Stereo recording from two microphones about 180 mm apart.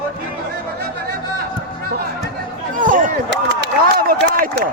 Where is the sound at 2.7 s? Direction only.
50° right (ahead or behind).